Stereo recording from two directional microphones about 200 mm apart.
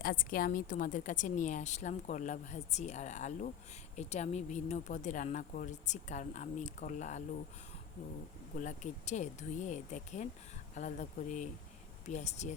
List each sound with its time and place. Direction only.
0.0 s a woman's voice: 45° left (ahead or behind)
8.5 s a woman's voice: 40° left (ahead or behind)